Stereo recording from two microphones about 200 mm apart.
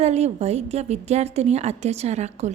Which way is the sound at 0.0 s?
30° right (ahead or behind).